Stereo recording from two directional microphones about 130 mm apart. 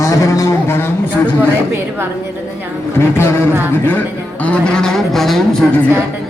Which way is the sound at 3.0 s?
20° left (ahead or behind).